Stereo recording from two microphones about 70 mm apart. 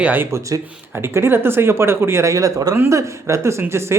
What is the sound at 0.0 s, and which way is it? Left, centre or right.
Speech, right.